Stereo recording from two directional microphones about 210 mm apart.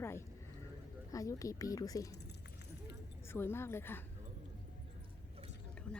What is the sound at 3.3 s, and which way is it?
Speech, 10° left (ahead or behind).